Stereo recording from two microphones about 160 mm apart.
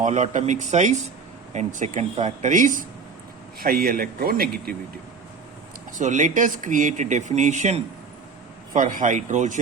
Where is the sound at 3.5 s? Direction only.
70° right (ahead or behind).